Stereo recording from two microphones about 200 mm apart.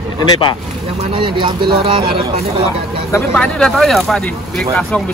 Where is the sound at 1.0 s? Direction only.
25° right (ahead or behind).